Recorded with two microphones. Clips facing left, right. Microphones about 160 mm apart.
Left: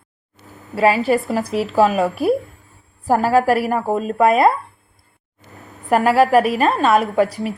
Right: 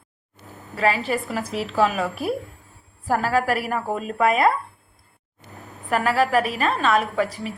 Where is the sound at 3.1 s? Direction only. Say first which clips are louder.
Left 6 dB; 40° left (ahead or behind).